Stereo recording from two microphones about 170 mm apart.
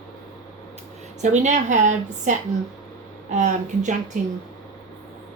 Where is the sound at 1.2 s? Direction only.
45° right (ahead or behind).